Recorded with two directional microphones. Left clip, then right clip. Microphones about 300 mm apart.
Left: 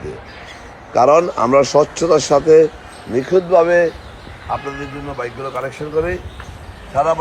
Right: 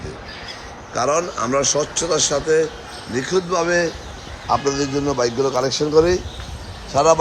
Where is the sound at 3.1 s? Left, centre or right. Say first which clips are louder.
Left 7 dB; centre.